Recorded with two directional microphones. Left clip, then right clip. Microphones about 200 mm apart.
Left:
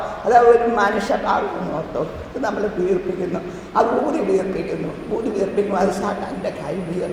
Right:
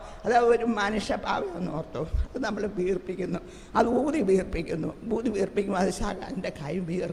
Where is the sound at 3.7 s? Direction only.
35° right (ahead or behind).